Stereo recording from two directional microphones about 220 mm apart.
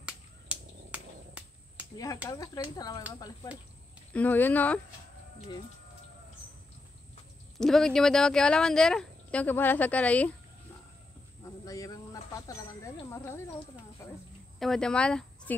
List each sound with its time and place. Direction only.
0.0 s a sound: 5° right (ahead or behind)
2.2 s speech: 15° left (ahead or behind)
4.1 s speech: 10° left (ahead or behind)
7.5 s speech: centre (ahead or behind)
11.4 s speech: 15° left (ahead or behind)
14.6 s speech: 5° left (ahead or behind)